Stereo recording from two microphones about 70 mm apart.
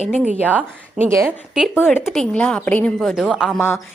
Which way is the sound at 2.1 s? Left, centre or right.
Centre.